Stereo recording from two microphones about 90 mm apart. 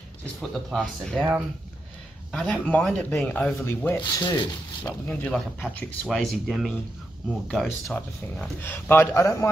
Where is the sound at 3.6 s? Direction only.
25° left (ahead or behind).